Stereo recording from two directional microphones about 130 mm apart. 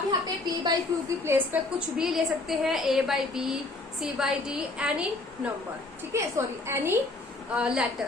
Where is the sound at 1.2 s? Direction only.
15° right (ahead or behind).